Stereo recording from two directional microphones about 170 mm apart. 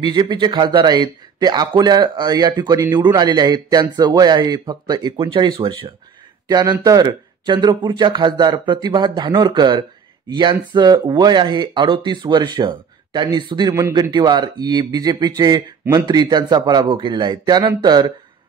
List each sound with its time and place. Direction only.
0.0 s a man's voice: 25° right (ahead or behind)